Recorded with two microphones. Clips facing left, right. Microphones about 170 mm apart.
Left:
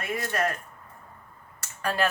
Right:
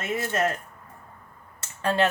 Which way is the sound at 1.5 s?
25° right (ahead or behind).